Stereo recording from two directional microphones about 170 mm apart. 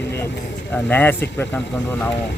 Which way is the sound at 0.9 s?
10° left (ahead or behind).